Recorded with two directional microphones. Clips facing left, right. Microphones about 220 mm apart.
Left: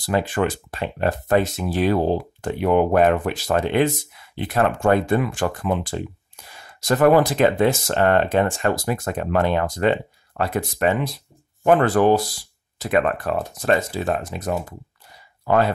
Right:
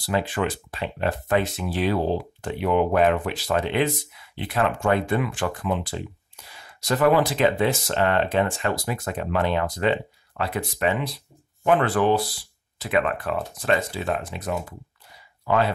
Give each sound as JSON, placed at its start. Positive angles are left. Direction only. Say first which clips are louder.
{"t": 0.0, "sound": "speech", "louder": "left 3 dB", "side_deg": 45}